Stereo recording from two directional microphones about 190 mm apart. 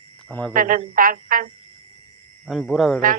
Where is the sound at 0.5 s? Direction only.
45° right (ahead or behind).